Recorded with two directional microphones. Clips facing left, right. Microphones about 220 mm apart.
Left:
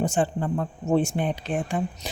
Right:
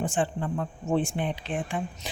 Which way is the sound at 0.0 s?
40° left (ahead or behind).